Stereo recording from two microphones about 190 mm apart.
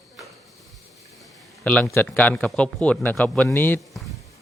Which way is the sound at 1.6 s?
10° left (ahead or behind).